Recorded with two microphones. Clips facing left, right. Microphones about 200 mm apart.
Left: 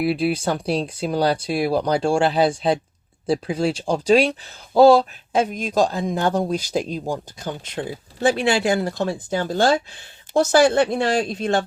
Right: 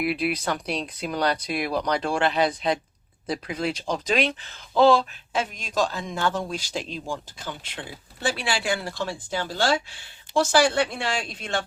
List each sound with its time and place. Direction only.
0.0 s speech: 30° left (ahead or behind); by 5.9 s 45° left (ahead or behind)
5.9 s speech: 35° left (ahead or behind)